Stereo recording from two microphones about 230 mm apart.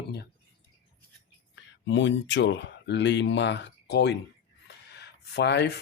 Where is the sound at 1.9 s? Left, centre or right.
Left.